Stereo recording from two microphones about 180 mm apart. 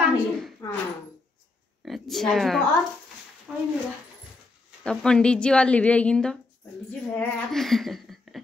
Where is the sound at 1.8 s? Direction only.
Centre (ahead or behind).